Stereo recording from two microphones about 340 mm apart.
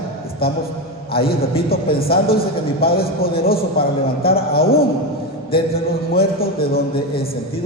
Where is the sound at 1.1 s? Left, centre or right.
Left.